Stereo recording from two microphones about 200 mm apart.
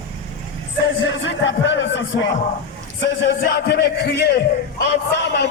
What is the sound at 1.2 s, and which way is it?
Speech, 65° left (ahead or behind).